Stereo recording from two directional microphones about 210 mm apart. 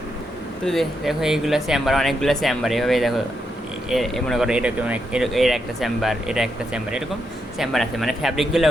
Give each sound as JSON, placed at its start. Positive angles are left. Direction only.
{"t": 0.6, "sound": "speech", "side_deg": 0}